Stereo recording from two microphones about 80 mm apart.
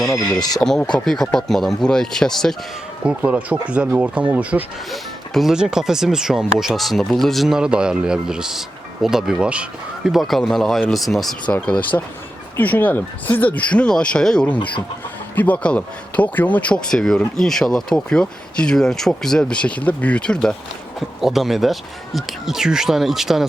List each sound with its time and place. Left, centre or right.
0.3 s speech: left
0.6 s speech: centre
3.0 s speech: centre
4.9 s speech: centre
11.4 s speech: centre
16.9 s speech: centre
21.2 s speech: centre